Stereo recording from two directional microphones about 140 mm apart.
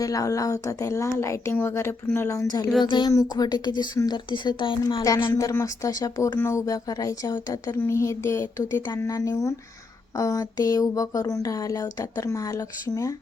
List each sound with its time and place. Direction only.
0.0 s a woman's voice: 25° left (ahead or behind)